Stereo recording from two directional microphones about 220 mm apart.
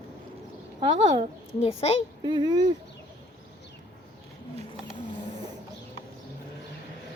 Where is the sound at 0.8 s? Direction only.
25° right (ahead or behind).